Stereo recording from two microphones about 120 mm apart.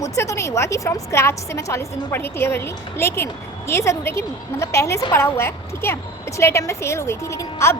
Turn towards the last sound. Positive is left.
turn(degrees=25)  # may be behind; listen again after turning